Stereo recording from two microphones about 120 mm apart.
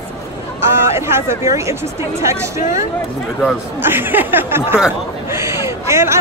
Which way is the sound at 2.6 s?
90° left.